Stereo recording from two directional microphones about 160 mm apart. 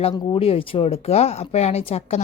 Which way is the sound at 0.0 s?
35° left (ahead or behind).